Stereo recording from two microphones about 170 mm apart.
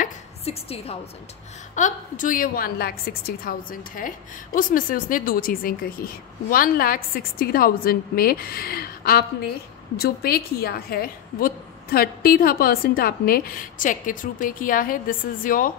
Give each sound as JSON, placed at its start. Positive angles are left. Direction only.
{"t": 0.5, "sound": "a woman's voice", "side_deg": 35}
{"t": 1.8, "sound": "a woman's voice", "side_deg": 50}